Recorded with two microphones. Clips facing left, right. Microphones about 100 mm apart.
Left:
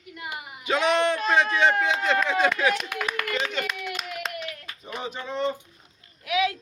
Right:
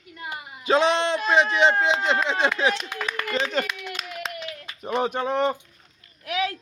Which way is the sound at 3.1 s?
35° right (ahead or behind).